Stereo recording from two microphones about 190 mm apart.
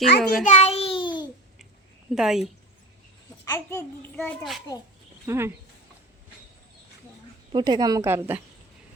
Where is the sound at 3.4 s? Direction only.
15° left (ahead or behind).